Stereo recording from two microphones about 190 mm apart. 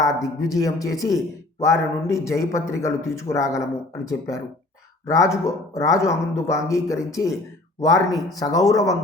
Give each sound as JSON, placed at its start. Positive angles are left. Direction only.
{"t": 0.0, "sound": "a man's voice", "side_deg": 15}